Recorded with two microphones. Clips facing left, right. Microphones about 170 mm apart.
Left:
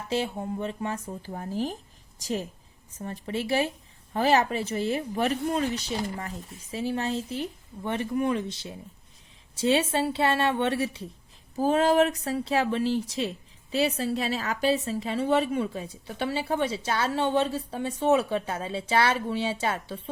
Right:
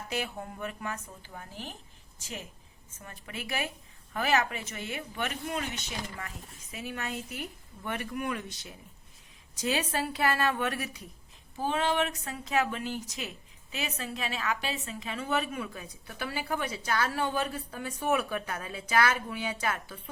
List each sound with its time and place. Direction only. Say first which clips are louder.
0.1 s speech: left 8 dB; 25° left (ahead or behind)
11.5 s speech: left 8 dB; 40° left (ahead or behind)